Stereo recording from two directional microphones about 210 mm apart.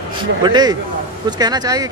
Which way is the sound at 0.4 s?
20° right (ahead or behind).